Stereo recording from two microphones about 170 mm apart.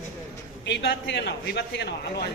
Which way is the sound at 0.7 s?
90° left.